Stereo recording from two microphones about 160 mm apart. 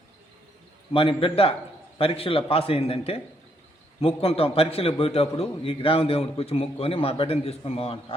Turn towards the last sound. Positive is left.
turn(degrees=35)  # may be behind; listen again after turning